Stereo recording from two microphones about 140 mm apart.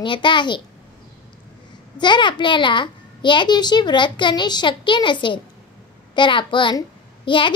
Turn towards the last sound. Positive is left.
turn(degrees=35)  # may be behind; listen again after turning